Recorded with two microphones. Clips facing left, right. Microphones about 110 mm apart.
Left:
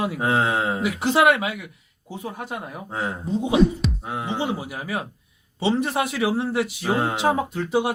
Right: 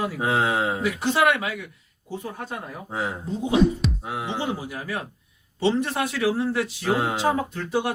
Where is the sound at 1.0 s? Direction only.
20° left (ahead or behind).